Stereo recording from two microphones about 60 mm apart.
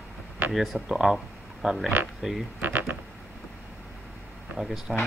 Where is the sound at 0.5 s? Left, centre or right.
Centre.